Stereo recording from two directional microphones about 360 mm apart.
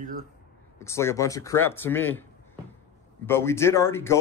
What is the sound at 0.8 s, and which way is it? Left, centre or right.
Speech, centre.